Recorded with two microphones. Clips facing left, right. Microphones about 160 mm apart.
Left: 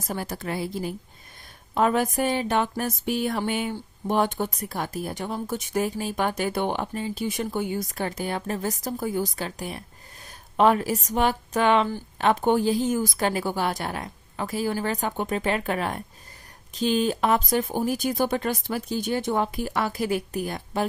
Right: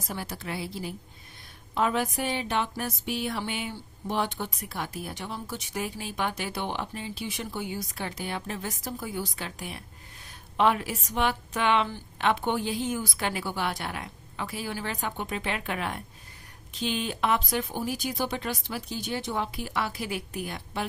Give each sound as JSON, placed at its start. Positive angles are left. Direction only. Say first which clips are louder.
{"t": 0.1, "sound": "a woman's voice", "louder": "left 5 dB", "side_deg": 45}